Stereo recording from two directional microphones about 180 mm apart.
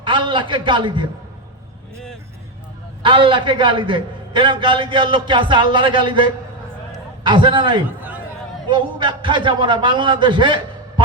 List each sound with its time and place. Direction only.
0.0 s a man's voice: 25° right (ahead or behind)
3.0 s a man's voice: 25° right (ahead or behind)